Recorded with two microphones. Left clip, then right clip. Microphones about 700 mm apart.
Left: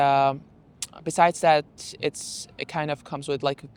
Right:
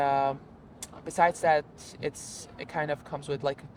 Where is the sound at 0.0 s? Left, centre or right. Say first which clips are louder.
Left 6 dB; left.